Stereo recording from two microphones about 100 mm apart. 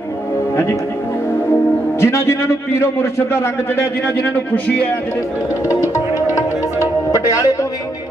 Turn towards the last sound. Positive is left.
turn(degrees=35)  # may be behind; listen again after turning